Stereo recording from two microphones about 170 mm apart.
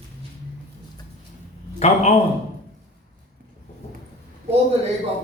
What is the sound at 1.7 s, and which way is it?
Speech, 40° left (ahead or behind).